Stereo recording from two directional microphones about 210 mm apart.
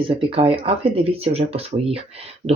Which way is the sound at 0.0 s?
25° right (ahead or behind).